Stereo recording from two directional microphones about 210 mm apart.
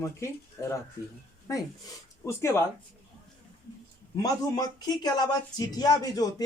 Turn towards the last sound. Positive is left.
turn(degrees=20)  # may be behind; listen again after turning